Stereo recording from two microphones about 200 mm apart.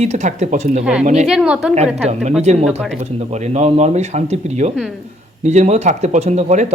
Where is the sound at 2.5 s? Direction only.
35° right (ahead or behind).